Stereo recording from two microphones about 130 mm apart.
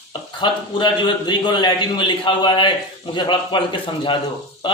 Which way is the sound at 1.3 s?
35° left (ahead or behind).